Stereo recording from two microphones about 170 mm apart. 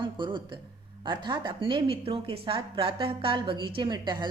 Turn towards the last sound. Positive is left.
turn(degrees=-25)  # may be behind; listen again after turning